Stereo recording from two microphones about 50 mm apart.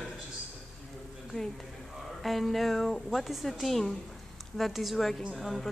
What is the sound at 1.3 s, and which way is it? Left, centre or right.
Speech, centre.